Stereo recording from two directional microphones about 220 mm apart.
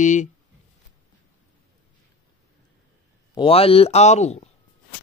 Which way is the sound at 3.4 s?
25° left (ahead or behind).